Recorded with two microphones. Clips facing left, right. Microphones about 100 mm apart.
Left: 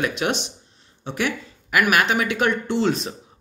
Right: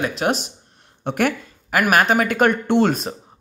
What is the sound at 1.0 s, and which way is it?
Speech, 50° right (ahead or behind).